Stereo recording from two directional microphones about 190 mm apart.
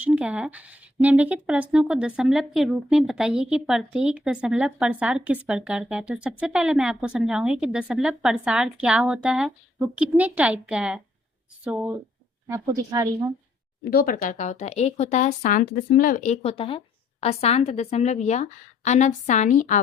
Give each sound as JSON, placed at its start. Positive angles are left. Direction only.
{"t": 0.0, "sound": "a woman's voice", "side_deg": -5}
{"t": 13.9, "sound": "speech", "side_deg": 50}